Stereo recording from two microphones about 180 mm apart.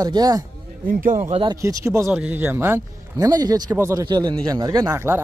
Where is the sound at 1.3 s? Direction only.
25° right (ahead or behind).